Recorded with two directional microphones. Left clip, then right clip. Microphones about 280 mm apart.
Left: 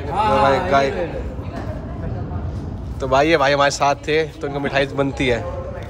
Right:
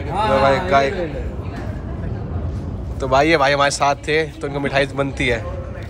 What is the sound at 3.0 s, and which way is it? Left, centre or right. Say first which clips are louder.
Speech: right 1 dB; centre.